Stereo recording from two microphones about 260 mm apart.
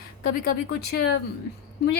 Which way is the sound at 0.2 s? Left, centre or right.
Left.